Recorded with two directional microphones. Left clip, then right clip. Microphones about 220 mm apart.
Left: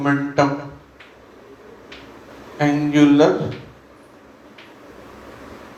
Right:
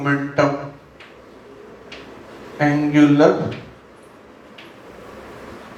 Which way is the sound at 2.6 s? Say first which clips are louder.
Right 1 dB; 35° left (ahead or behind).